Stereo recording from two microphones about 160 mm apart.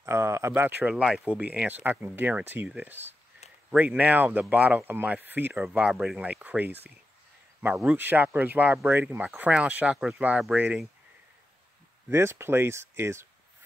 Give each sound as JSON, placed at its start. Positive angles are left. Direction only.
{"t": 0.0, "sound": "speech", "side_deg": -15}
{"t": 12.1, "sound": "speech", "side_deg": -15}